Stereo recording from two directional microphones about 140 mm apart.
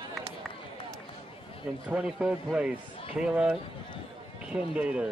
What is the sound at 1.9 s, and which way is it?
A man's voice, 10° right (ahead or behind).